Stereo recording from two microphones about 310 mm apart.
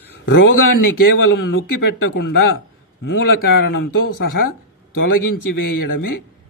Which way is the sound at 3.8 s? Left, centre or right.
Left.